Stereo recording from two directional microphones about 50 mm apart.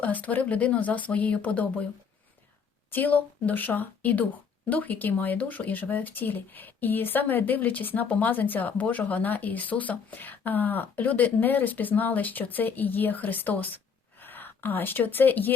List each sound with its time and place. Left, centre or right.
0.0 s speech: left
2.9 s speech: left